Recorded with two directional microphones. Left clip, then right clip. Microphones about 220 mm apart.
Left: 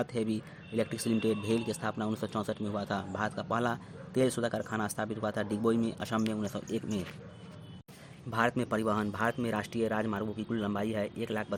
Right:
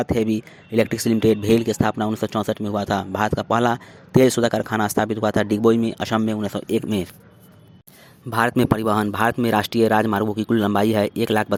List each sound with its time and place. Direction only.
0.0 s speech: 30° right (ahead or behind)
8.3 s speech: 45° right (ahead or behind)